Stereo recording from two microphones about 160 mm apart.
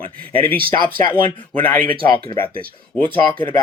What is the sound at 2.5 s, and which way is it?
Speech, 65° right (ahead or behind).